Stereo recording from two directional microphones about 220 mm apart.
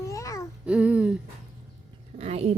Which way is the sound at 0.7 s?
5° right (ahead or behind).